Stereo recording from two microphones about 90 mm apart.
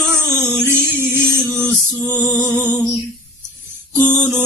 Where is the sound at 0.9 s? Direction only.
20° right (ahead or behind).